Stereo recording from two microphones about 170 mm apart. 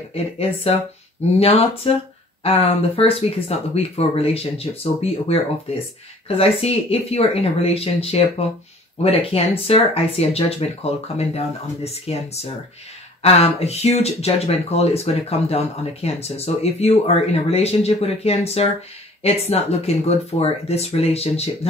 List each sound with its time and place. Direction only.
0.1 s speech: 35° left (ahead or behind)
13.2 s speech: 35° left (ahead or behind)